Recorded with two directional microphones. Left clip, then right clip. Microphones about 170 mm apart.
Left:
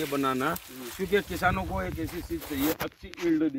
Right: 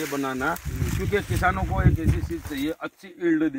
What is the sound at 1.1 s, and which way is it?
Speech, 45° left (ahead or behind).